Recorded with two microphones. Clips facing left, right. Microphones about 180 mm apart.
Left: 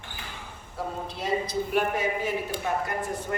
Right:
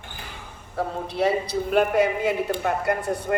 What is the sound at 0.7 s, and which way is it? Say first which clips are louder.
Speech: right 8 dB; 65° right (ahead or behind).